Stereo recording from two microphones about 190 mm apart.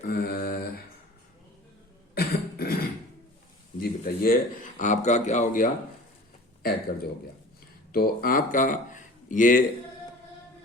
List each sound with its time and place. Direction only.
0.1 s mantra: 50° left (ahead or behind)
2.1 s cough: 55° left (ahead or behind)
3.8 s a man's voice: 50° left (ahead or behind)
6.6 s speech: 55° left (ahead or behind)
7.9 s speech: 50° left (ahead or behind)